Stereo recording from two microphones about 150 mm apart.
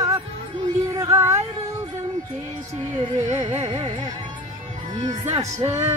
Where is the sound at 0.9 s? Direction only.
20° right (ahead or behind).